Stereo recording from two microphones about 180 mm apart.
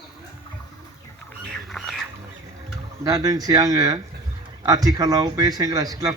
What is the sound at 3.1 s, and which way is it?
A man's voice, 20° right (ahead or behind).